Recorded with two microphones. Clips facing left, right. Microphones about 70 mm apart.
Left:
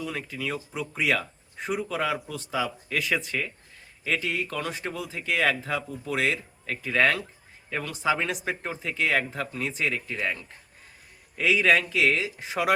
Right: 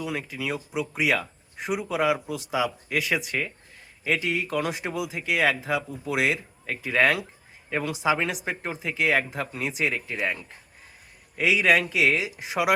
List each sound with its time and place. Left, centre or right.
0.0 s speech: centre
8.1 s speech: centre